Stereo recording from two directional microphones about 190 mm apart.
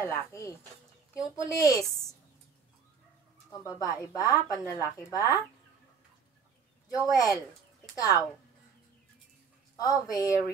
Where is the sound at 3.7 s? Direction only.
20° left (ahead or behind).